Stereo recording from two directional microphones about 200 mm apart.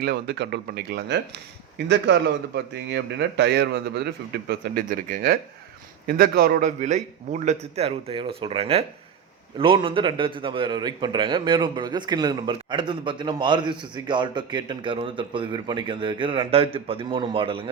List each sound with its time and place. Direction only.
0.0 s a man's voice: 55° right (ahead or behind); by 17.7 s 25° right (ahead or behind)